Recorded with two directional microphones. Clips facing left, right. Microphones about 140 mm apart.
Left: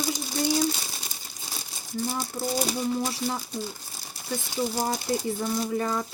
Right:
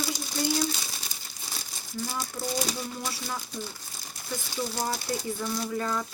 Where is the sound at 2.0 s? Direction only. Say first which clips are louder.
Left 3 dB; 25° left (ahead or behind).